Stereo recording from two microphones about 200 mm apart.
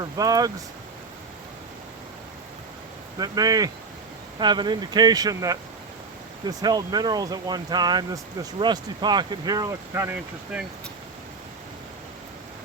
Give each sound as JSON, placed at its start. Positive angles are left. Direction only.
{"t": 0.0, "sound": "speech", "side_deg": -20}
{"t": 3.2, "sound": "speech", "side_deg": -20}
{"t": 10.5, "sound": "speech", "side_deg": -5}